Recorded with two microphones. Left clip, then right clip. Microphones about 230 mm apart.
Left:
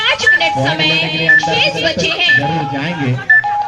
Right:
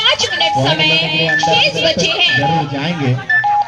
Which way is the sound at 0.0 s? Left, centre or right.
Right.